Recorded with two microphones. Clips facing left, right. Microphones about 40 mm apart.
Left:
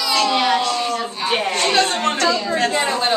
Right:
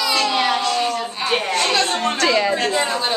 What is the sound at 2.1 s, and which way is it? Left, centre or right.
Speech, right.